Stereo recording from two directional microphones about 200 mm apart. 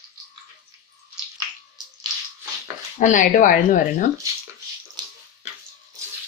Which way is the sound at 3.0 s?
40° left (ahead or behind).